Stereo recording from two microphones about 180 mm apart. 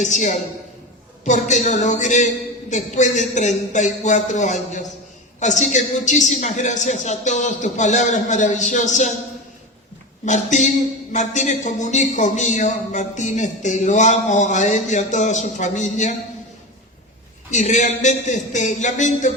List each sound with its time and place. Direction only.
0.0 s a man's voice: 40° left (ahead or behind)
10.2 s speech: 40° left (ahead or behind)
17.5 s speech: 40° left (ahead or behind)